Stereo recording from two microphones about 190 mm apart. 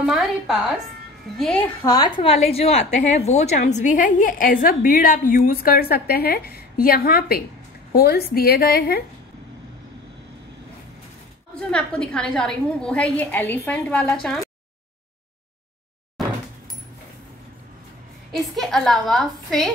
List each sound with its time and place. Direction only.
0.0 s a woman's voice: centre (ahead or behind)
1.9 s a woman's voice: 20° left (ahead or behind); by 9.0 s 50° left (ahead or behind)
11.7 s a woman's voice: 5° left (ahead or behind)
18.3 s a woman's voice: centre (ahead or behind)